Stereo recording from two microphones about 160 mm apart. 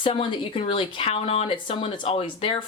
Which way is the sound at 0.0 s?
30° left (ahead or behind).